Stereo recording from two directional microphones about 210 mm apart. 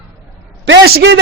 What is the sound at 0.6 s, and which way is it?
Speech, 55° right (ahead or behind).